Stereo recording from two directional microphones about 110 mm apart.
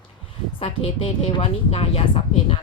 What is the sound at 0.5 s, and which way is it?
Speech, 55° left (ahead or behind).